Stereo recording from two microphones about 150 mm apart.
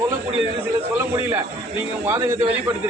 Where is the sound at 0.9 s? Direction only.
15° right (ahead or behind).